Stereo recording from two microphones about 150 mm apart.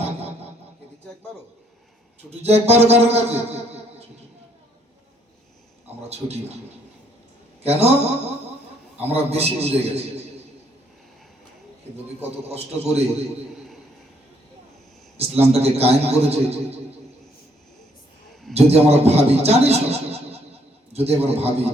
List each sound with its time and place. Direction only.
2.4 s a man's voice: 45° right (ahead or behind)
6.0 s a man's voice: 45° right (ahead or behind)
7.6 s a man's voice: 45° right (ahead or behind)
12.0 s a man's voice: 45° right (ahead or behind)
15.2 s a man's voice: 45° right (ahead or behind)
18.5 s a man's voice: 45° right (ahead or behind)